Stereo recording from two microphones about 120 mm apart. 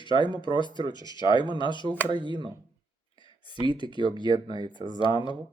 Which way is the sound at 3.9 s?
45° left (ahead or behind).